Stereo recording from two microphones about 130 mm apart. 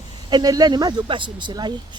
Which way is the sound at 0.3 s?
30° right (ahead or behind).